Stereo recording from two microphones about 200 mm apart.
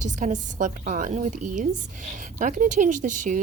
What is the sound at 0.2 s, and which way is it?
Speech, 40° right (ahead or behind).